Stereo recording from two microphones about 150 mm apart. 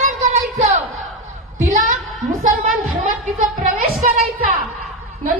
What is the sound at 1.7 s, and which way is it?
Speech, 55° right (ahead or behind).